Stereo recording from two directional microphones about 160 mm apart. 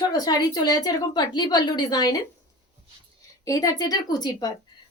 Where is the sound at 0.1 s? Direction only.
25° left (ahead or behind).